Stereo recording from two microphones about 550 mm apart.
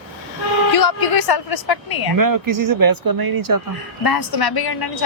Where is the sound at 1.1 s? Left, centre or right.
Left.